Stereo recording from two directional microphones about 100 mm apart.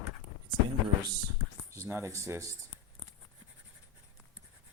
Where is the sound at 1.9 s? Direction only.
30° right (ahead or behind).